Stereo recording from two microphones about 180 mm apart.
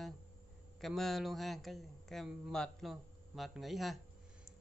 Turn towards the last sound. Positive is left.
turn(degrees=0)  # may be behind; listen again after turning